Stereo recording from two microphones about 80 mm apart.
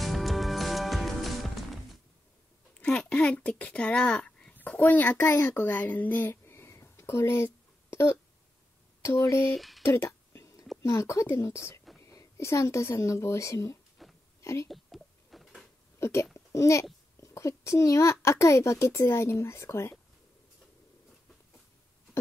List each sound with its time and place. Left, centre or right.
0.0 s music: centre
2.8 s speech: centre
6.4 s a sound: left
9.0 s a child's voice: left
9.5 s speech: centre
9.8 s whispering: left
10.8 s a child's voice: left
14.0 s a sound: centre
14.4 s speech: left
14.7 s a sound: centre
16.0 s speech: left
16.3 s a sound: left
17.2 s a child's voice: left